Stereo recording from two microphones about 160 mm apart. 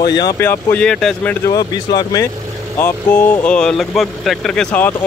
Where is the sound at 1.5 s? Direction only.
25° left (ahead or behind).